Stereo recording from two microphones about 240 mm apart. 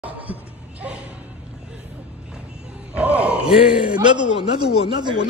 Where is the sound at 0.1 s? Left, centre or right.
Centre.